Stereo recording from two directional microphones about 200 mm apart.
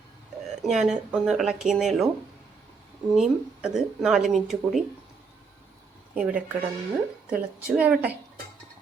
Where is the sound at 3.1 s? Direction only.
Centre (ahead or behind).